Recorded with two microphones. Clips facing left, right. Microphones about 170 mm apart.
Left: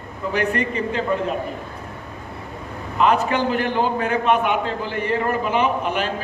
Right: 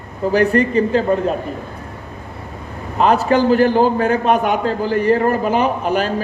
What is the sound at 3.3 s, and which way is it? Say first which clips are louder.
A man's voice: right 8 dB; 35° right (ahead or behind).